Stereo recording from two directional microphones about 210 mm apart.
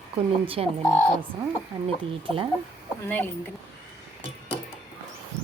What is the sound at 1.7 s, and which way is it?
Speech, 20° right (ahead or behind).